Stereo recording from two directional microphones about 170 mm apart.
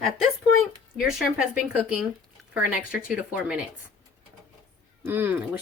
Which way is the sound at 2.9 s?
5° right (ahead or behind).